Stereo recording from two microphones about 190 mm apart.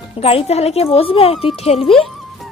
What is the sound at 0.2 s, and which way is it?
Speech, 30° left (ahead or behind).